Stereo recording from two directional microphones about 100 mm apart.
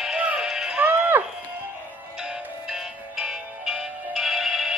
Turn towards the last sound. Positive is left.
turn(degrees=-5)  # may be behind; listen again after turning